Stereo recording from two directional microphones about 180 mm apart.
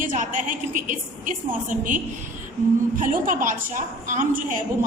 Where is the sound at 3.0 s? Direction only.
50° right (ahead or behind).